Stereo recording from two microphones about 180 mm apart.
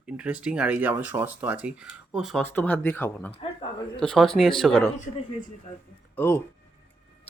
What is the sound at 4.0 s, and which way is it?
Speech, centre (ahead or behind).